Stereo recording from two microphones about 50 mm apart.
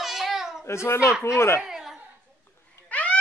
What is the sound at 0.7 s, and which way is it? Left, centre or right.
Speech, left.